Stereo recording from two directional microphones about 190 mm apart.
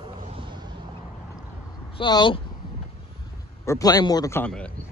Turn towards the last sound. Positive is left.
turn(degrees=5)  # may be behind; listen again after turning